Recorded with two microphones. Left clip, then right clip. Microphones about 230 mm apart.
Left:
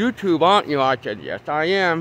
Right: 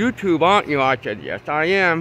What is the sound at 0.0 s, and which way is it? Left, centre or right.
Speech, centre.